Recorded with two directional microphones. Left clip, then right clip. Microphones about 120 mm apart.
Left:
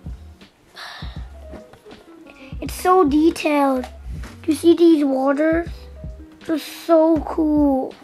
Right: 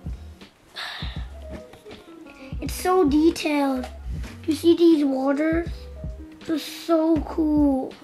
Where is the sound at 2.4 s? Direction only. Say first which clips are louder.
Left 5 dB; 20° left (ahead or behind).